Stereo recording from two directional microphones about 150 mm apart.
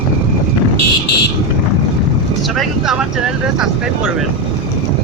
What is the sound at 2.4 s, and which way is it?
Speech, centre (ahead or behind).